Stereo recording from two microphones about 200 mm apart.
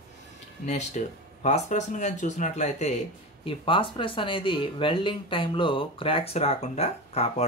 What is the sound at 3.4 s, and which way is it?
Speech, 25° left (ahead or behind).